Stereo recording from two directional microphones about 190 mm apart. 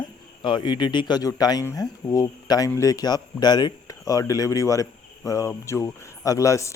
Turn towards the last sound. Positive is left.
turn(degrees=15)  # may be behind; listen again after turning